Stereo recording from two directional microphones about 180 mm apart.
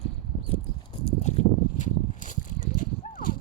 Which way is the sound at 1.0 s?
35° left (ahead or behind).